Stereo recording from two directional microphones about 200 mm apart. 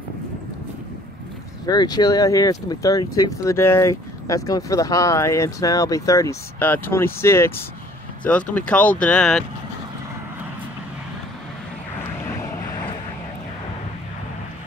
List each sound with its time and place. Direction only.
1.7 s speech: 20° left (ahead or behind); by 9.4 s 5° left (ahead or behind)